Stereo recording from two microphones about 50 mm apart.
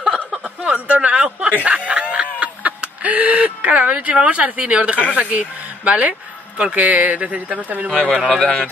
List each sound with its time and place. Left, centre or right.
0.7 s speech: right
1.5 s snicker: right
5.1 s speech: right
7.9 s speech: centre